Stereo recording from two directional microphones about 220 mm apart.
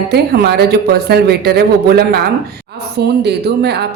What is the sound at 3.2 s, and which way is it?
Speech, 50° right (ahead or behind).